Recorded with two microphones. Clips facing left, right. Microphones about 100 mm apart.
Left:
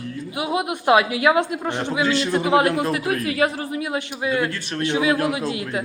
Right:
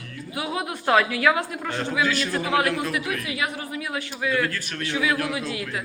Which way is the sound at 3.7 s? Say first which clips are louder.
Left 5 dB; 25° left (ahead or behind).